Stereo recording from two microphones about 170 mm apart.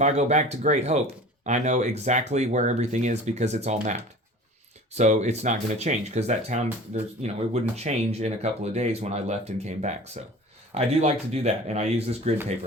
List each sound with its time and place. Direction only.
0.0 s speech: 40° right (ahead or behind)
4.9 s speech: 45° right (ahead or behind)